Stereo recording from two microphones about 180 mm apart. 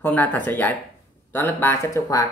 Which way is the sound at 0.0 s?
10° left (ahead or behind).